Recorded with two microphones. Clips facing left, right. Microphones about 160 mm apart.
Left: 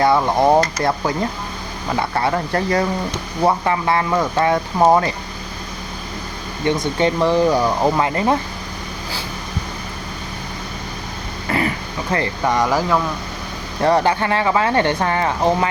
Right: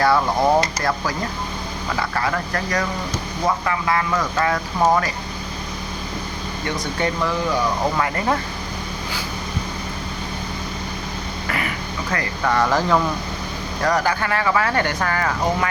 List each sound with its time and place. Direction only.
0.0 s speech: 20° left (ahead or behind)
7.0 s speech: 30° left (ahead or behind)
11.4 s vehicle: 30° left (ahead or behind)
12.1 s speech: 25° left (ahead or behind)
12.5 s speech: 10° left (ahead or behind)
13.8 s speech: 25° left (ahead or behind)